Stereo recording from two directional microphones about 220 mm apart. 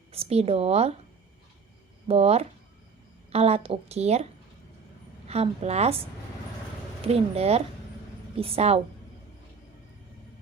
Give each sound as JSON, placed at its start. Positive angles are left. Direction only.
{"t": 0.1, "sound": "a woman's voice", "side_deg": -25}
{"t": 2.0, "sound": "a woman's voice", "side_deg": -25}
{"t": 5.3, "sound": "a woman's voice", "side_deg": -30}
{"t": 7.0, "sound": "a woman's voice", "side_deg": -25}